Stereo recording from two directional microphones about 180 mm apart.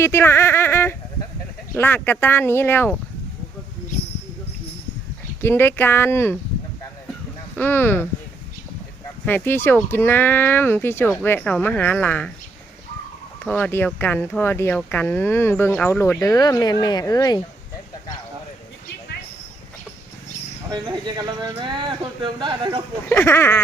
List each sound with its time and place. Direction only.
0.0 s speech: 15° left (ahead or behind)
5.4 s speech: 15° left (ahead or behind)
7.5 s speech: 10° left (ahead or behind)
9.2 s speech: 10° left (ahead or behind)
13.4 s speech: 10° left (ahead or behind)
20.7 s speech: 25° right (ahead or behind)
23.0 s speech: 10° left (ahead or behind)